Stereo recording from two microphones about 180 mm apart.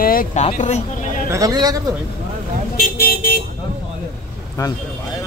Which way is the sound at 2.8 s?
55° left (ahead or behind).